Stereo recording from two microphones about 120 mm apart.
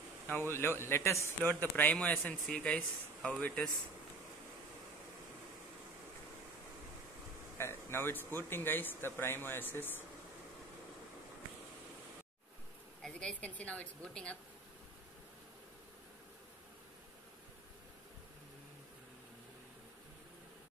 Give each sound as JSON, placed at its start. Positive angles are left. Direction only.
{"t": 0.3, "sound": "a man's voice", "side_deg": 20}
{"t": 7.5, "sound": "speech", "side_deg": 20}
{"t": 13.0, "sound": "speech", "side_deg": 10}